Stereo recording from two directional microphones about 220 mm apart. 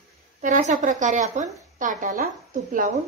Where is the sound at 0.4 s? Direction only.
35° right (ahead or behind).